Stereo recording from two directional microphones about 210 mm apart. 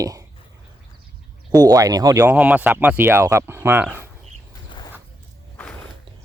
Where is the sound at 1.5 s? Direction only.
20° right (ahead or behind).